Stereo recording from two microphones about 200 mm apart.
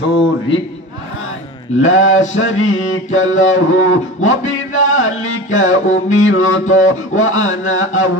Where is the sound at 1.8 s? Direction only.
80° left.